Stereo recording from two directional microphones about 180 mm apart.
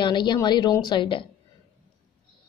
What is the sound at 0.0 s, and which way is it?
A woman's voice, 25° left (ahead or behind).